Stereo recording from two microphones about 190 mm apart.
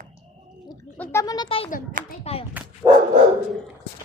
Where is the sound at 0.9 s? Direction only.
10° left (ahead or behind); by 2.4 s 30° left (ahead or behind).